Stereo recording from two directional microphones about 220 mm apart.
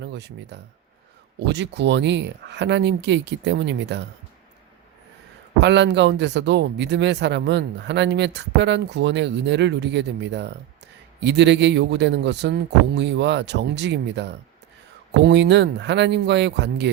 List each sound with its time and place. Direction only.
0.0 s speech: 50° right (ahead or behind)
5.5 s speech: 50° right (ahead or behind)